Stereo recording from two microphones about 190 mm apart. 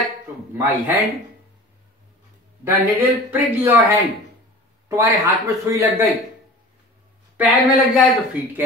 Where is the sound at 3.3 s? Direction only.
10° right (ahead or behind).